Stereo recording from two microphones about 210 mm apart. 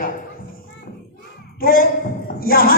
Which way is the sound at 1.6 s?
45° left (ahead or behind).